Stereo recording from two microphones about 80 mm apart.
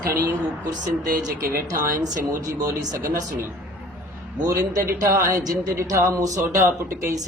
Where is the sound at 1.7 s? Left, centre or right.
Right.